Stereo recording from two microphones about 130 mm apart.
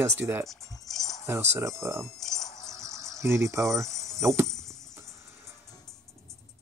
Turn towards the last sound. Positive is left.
turn(degrees=-20)  # may be behind; listen again after turning